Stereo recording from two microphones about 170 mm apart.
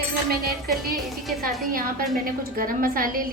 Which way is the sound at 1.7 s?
55° right (ahead or behind).